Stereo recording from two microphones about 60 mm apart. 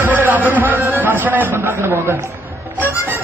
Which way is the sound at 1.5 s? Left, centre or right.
Right.